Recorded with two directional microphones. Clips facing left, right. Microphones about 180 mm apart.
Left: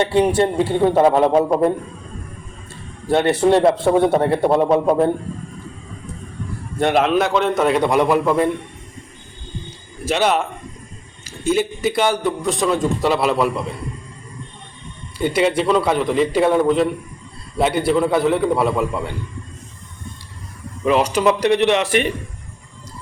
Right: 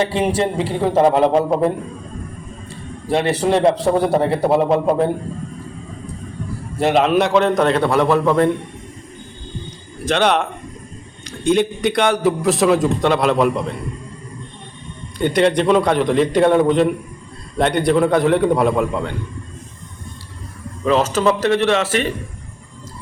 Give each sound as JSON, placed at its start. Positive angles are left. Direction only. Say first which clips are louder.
{"t": 0.2, "sound": "a man's voice", "louder": "left 3 dB", "side_deg": 0}
{"t": 3.1, "sound": "a man's voice", "louder": "left 2 dB", "side_deg": 0}
{"t": 6.7, "sound": "a man's voice", "louder": "right 1 dB", "side_deg": 0}
{"t": 10.1, "sound": "a man's voice", "louder": "right 1 dB", "side_deg": 5}
{"t": 15.2, "sound": "a man's voice", "louder": "right 2 dB", "side_deg": 5}
{"t": 20.8, "sound": "speech", "louder": "even", "side_deg": 15}